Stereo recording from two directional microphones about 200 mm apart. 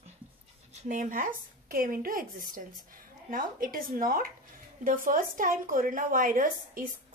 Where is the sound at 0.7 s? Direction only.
40° right (ahead or behind).